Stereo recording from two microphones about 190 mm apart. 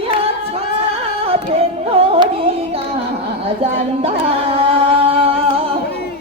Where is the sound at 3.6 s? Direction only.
30° right (ahead or behind).